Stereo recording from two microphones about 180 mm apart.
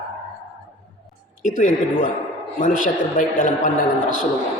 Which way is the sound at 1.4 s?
45° left (ahead or behind).